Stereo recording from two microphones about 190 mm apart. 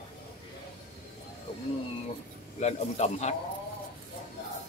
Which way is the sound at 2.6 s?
35° left (ahead or behind).